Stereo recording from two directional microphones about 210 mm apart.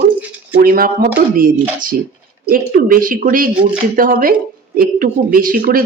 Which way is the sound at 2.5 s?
40° right (ahead or behind).